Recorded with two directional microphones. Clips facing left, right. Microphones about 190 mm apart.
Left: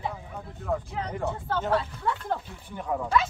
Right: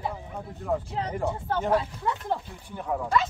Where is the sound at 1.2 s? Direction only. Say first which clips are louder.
Right 1 dB; 15° right (ahead or behind).